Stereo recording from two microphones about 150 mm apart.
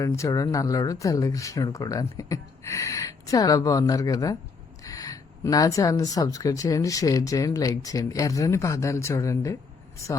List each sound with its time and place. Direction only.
0.0 s speech: 20° left (ahead or behind)